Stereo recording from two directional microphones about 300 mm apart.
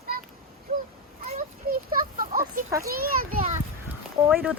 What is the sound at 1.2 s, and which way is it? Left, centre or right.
Children playing, right.